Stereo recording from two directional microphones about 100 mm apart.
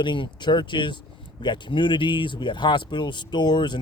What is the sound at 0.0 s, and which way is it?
Speech, 50° left (ahead or behind).